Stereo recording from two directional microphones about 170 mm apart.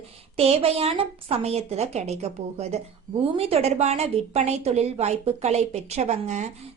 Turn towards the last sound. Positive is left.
turn(degrees=-40)  # may be behind; listen again after turning